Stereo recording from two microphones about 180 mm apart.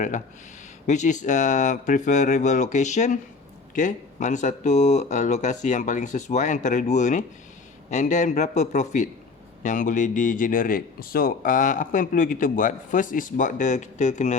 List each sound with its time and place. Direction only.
0.9 s speech: 40° left (ahead or behind)